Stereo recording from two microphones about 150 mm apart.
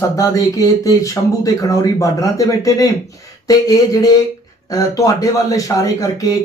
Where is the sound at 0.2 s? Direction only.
25° left (ahead or behind).